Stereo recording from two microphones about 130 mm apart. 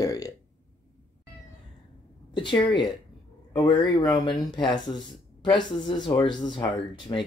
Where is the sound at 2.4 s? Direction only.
35° left (ahead or behind).